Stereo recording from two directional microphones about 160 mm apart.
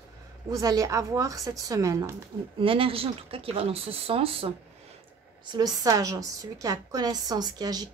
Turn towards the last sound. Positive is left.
turn(degrees=-25)  # may be behind; listen again after turning